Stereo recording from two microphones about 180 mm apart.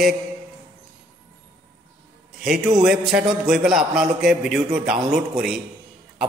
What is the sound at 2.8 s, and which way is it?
A man's voice, centre (ahead or behind).